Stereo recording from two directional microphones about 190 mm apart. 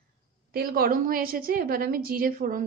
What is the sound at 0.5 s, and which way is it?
A woman's voice, 50° right (ahead or behind).